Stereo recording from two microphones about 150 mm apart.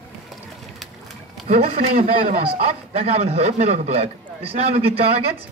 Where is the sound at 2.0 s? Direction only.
75° right (ahead or behind).